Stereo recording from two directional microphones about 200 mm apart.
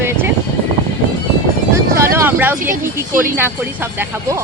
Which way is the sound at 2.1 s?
10° right (ahead or behind).